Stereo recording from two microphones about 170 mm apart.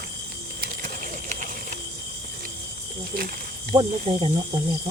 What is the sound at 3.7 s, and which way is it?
Speech, 30° right (ahead or behind).